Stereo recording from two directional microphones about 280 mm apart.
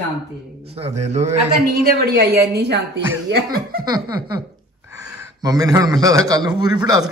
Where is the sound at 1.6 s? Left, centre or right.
Right.